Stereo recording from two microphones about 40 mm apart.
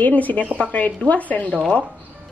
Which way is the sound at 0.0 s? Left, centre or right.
Left.